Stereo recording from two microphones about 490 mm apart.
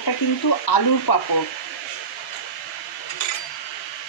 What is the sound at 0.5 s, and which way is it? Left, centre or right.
Speech, left.